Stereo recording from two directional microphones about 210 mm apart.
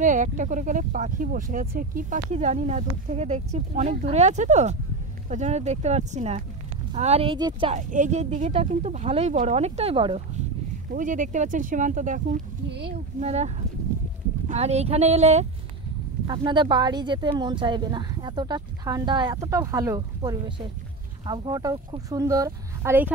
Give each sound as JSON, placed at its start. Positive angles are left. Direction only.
{"t": 0.0, "sound": "speech", "side_deg": -35}
{"t": 7.7, "sound": "speech", "side_deg": -35}
{"t": 10.9, "sound": "speech", "side_deg": -40}
{"t": 12.6, "sound": "speech", "side_deg": -55}
{"t": 13.2, "sound": "speech", "side_deg": -30}
{"t": 14.5, "sound": "speech", "side_deg": -30}
{"t": 16.3, "sound": "speech", "side_deg": -20}